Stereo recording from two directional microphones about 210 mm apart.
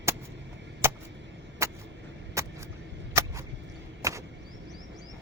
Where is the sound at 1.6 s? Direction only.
15° right (ahead or behind).